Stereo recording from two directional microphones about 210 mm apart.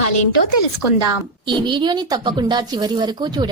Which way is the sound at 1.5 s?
20° right (ahead or behind).